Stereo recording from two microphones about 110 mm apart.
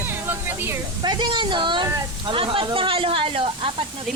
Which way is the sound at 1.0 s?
45° right (ahead or behind).